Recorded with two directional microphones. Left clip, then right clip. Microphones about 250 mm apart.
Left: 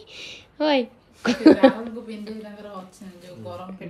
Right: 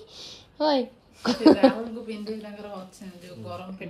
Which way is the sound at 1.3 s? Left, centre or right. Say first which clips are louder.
Left 3 dB; centre.